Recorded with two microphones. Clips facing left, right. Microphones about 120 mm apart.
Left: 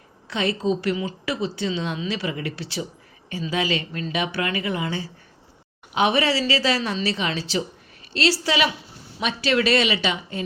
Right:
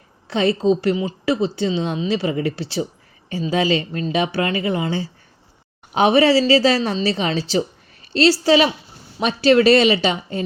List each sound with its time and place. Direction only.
0.3 s a woman's voice: 30° right (ahead or behind)